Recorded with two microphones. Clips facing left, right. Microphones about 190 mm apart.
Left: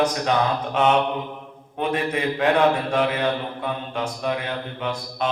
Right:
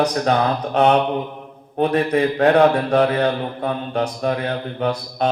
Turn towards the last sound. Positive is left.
turn(degrees=-40)  # may be behind; listen again after turning